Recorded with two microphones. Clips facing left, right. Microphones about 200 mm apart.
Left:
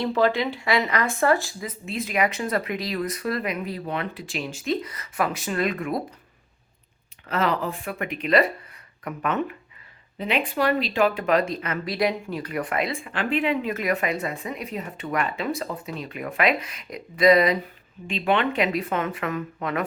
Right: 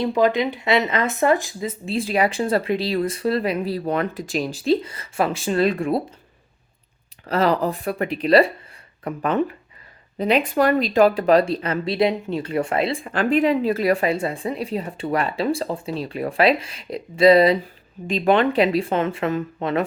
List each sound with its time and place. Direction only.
0.0 s speech: 15° right (ahead or behind)
7.3 s speech: 35° right (ahead or behind)